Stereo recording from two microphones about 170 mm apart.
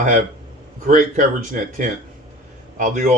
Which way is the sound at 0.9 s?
50° right (ahead or behind).